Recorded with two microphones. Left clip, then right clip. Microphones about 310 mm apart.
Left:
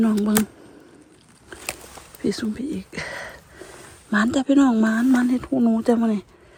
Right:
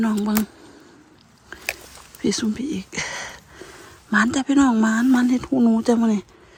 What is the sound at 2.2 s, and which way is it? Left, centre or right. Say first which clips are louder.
Speech: right 2 dB; centre.